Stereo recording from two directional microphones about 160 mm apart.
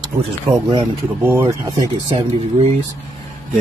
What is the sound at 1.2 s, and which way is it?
Speech, 15° right (ahead or behind).